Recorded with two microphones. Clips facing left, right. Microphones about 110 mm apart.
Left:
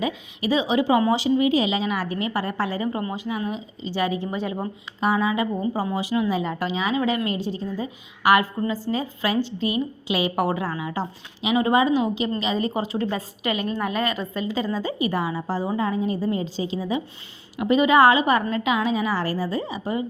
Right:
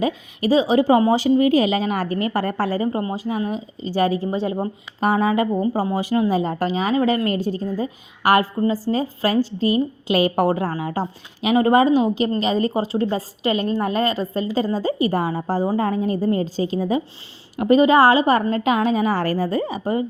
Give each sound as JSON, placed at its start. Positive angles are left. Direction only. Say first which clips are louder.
{"t": 0.0, "sound": "a woman's voice", "louder": "right 4 dB", "side_deg": -40}
{"t": 4.9, "sound": "a woman's voice", "louder": "right 4 dB", "side_deg": -50}